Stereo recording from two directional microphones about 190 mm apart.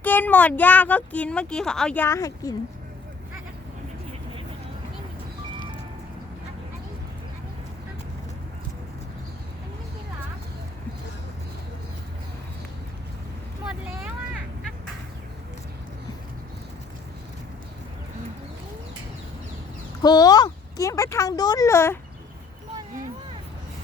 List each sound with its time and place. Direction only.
0.0 s speech: 10° left (ahead or behind)
20.0 s speech: 20° left (ahead or behind)